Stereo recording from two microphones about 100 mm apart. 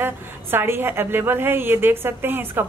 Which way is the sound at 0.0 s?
20° right (ahead or behind).